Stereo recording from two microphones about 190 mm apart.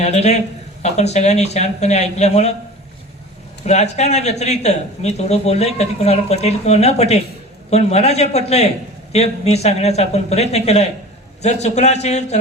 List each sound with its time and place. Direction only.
0.0 s speech: 35° left (ahead or behind)
3.7 s speech: 35° left (ahead or behind)